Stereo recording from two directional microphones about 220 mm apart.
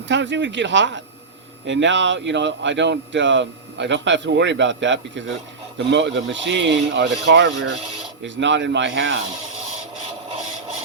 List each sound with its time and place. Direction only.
0.1 s speech: 55° right (ahead or behind)